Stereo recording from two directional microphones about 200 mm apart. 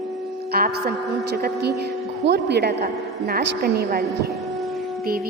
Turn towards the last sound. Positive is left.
turn(degrees=-50)  # may be behind; listen again after turning